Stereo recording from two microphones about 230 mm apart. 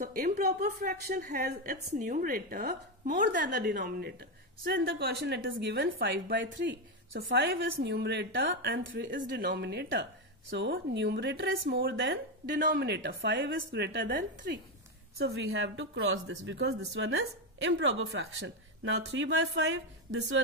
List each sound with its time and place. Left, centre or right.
0.0 s a woman's voice: right